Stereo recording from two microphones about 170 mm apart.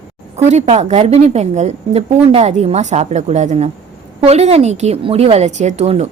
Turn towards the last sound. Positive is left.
turn(degrees=-40)  # may be behind; listen again after turning